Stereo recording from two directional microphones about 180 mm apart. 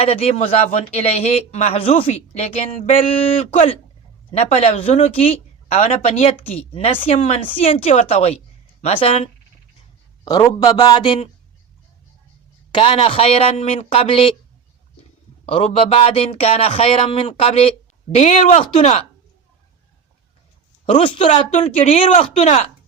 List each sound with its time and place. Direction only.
0.0 s speech: 35° left (ahead or behind)
10.2 s a man's voice: 20° left (ahead or behind)
12.7 s speech: 30° left (ahead or behind)
15.4 s speech: 30° left (ahead or behind)
21.0 s speech: 30° left (ahead or behind)